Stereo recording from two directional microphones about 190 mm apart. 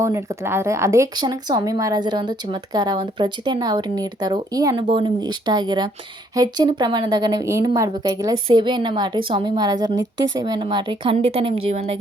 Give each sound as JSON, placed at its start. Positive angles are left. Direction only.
{"t": 0.0, "sound": "speech", "side_deg": -15}